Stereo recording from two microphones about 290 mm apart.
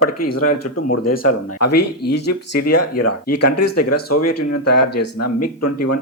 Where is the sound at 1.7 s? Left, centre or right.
Left.